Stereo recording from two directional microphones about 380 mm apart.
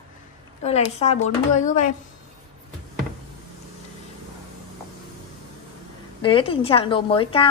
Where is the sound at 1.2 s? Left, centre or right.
Centre.